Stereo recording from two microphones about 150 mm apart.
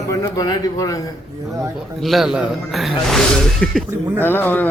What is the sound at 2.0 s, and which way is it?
Speech, centre (ahead or behind).